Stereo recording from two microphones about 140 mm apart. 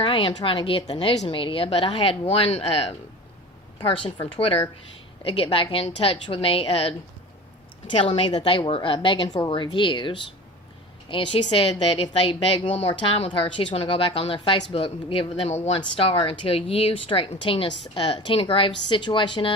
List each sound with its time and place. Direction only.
0.0 s a woman's voice: 40° left (ahead or behind)